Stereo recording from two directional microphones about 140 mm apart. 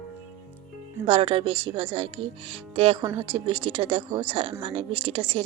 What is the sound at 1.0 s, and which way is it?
Speech, 45° right (ahead or behind).